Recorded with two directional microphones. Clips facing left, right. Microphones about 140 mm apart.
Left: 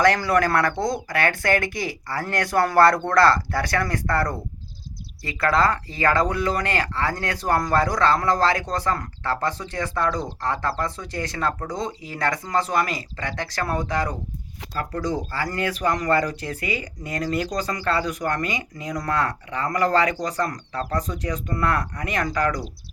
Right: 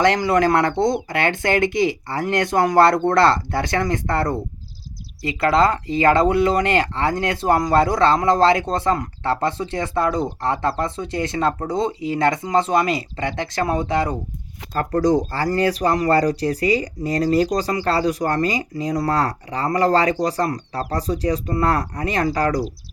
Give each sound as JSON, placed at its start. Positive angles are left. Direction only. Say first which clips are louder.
{"t": 0.0, "sound": "speech", "louder": "right 3 dB", "side_deg": -20}
{"t": 14.7, "sound": "speech", "louder": "right 9 dB", "side_deg": -50}